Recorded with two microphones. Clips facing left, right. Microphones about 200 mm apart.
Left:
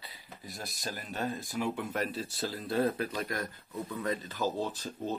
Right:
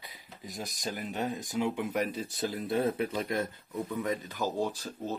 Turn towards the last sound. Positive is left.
turn(degrees=-10)  # may be behind; listen again after turning